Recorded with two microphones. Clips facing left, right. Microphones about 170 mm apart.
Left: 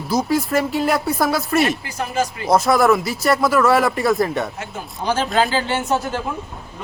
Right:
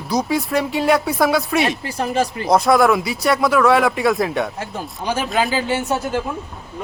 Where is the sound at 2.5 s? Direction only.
Centre (ahead or behind).